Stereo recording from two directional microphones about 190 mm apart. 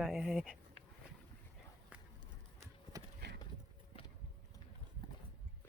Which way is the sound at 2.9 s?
15° right (ahead or behind).